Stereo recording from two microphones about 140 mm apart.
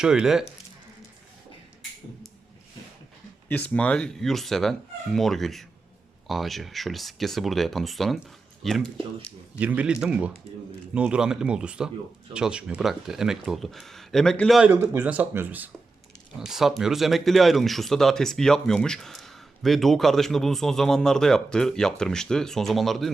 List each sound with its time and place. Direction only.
0.0 s speech: 5° right (ahead or behind)
3.5 s speech: 10° left (ahead or behind)
9.6 s speech: 10° right (ahead or behind)
14.7 s speech: 20° right (ahead or behind); by 23.1 s centre (ahead or behind)